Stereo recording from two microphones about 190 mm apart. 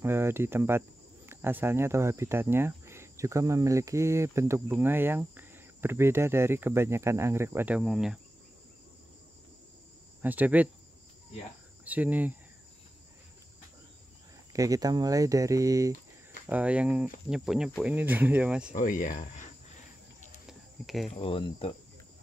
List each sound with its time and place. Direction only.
0.0 s speech: 10° right (ahead or behind)
10.2 s speech: 10° right (ahead or behind)
11.8 s cricket: 10° right (ahead or behind)
14.5 s speech: 15° right (ahead or behind)
18.7 s speech: 45° left (ahead or behind)
20.4 s cricket: centre (ahead or behind)
21.1 s speech: 30° left (ahead or behind)